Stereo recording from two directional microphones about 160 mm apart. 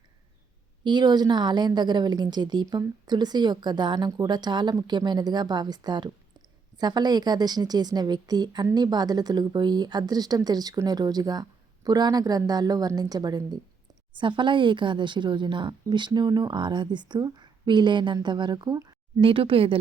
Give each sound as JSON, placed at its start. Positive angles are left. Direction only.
{"t": 0.9, "sound": "a woman's voice", "side_deg": -25}